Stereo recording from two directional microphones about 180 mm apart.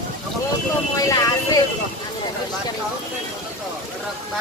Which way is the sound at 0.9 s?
20° left (ahead or behind).